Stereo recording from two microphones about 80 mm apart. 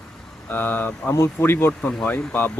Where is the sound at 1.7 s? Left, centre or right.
Centre.